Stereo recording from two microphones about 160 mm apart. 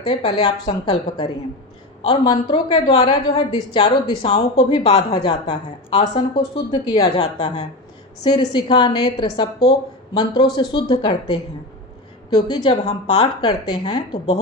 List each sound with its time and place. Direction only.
0.0 s a woman's voice: 25° left (ahead or behind)
5.1 s speech: 25° left (ahead or behind)
12.4 s a woman's voice: 35° left (ahead or behind)
13.2 s speech: 30° left (ahead or behind)